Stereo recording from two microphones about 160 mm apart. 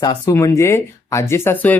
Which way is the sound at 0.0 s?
20° left (ahead or behind).